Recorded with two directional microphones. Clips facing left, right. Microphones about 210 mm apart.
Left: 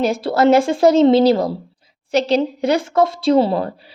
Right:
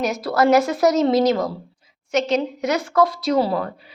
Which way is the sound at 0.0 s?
30° left (ahead or behind).